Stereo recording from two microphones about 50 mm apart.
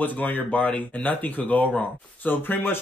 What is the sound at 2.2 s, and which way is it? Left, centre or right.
Speech, left.